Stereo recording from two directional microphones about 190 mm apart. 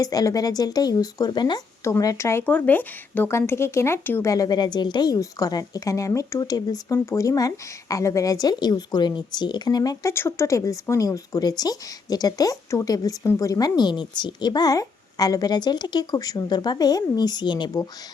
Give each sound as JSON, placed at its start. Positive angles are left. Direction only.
{"t": 0.0, "sound": "speech", "side_deg": 20}